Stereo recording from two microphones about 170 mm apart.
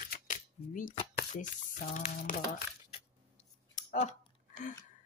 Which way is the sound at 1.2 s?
50° left (ahead or behind).